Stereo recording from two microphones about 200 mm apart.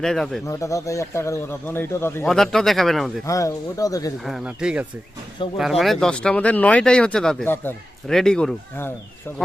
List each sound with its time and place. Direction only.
0.0 s speech: centre (ahead or behind)
0.4 s speech: 15° left (ahead or behind)
3.2 s speech: 15° left (ahead or behind)
4.3 s speech: 5° right (ahead or behind)